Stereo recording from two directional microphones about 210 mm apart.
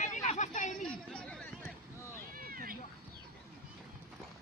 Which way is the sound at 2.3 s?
45° right (ahead or behind).